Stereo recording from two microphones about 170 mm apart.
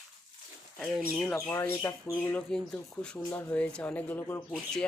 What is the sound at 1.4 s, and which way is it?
A man's voice, 15° left (ahead or behind).